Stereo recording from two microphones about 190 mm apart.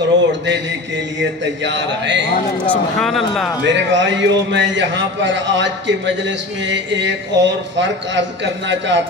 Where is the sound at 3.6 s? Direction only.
70° right (ahead or behind).